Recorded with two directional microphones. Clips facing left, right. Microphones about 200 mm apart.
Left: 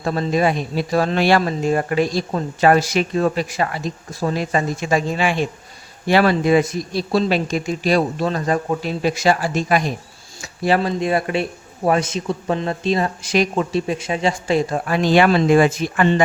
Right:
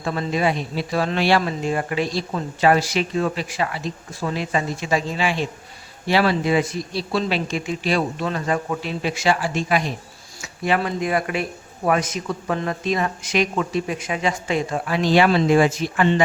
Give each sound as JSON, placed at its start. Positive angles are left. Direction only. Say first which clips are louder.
{"t": 0.0, "sound": "speech", "louder": "left 3 dB", "side_deg": 40}
{"t": 14.8, "sound": "speech", "louder": "left 2 dB", "side_deg": 50}